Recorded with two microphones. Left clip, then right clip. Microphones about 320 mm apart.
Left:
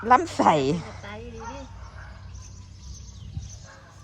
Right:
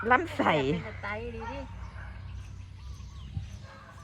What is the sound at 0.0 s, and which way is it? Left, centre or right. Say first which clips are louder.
Speech: left 6 dB; centre.